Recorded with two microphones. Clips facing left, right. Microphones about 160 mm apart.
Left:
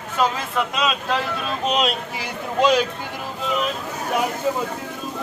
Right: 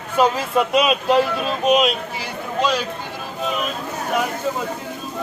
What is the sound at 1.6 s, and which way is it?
Speech, 10° right (ahead or behind).